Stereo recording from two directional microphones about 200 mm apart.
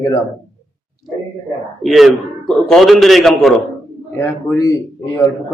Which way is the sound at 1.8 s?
Centre (ahead or behind).